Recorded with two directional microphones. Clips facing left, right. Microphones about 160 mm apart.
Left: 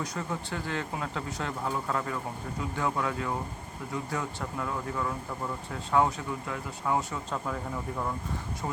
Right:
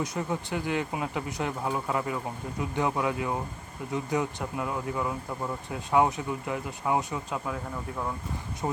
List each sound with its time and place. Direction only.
0.0 s speech: 20° right (ahead or behind); by 8.1 s 5° right (ahead or behind)
8.6 s speech: 25° right (ahead or behind)